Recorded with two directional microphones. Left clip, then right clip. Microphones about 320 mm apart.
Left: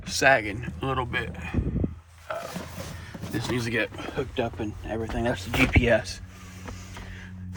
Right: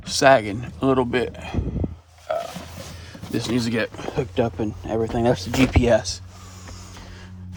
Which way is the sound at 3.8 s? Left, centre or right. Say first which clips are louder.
Right 5 dB; right.